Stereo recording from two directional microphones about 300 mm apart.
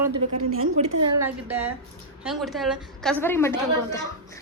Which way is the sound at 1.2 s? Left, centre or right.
Centre.